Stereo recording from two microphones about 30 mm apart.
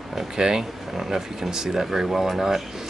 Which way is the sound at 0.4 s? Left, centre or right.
Right.